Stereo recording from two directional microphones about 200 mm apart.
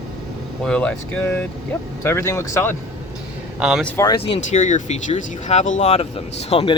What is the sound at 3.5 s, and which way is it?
Speech, 5° right (ahead or behind).